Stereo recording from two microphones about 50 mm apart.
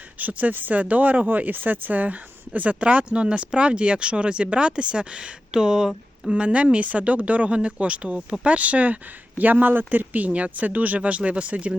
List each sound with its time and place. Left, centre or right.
0.2 s speech: right